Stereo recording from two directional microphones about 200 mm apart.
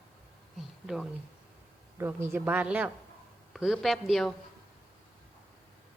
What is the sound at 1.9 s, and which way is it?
A woman's voice, 10° right (ahead or behind).